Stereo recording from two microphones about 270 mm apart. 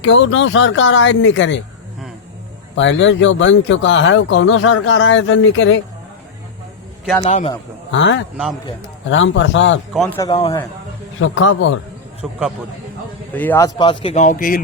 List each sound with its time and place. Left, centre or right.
0.0 s speech: left
2.7 s speech: left
7.2 s speech: left
7.9 s speech: left
9.9 s a man's voice: centre
11.2 s speech: left
12.2 s a man's voice: centre
14.0 s speech: left